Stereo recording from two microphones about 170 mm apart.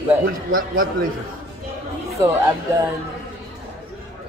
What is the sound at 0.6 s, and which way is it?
Speech, 55° right (ahead or behind).